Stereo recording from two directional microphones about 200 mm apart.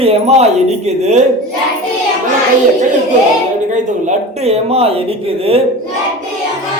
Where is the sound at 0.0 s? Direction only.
30° right (ahead or behind).